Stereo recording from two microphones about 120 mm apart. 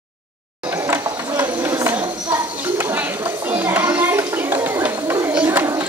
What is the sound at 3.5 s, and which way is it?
Children playing, 15° right (ahead or behind).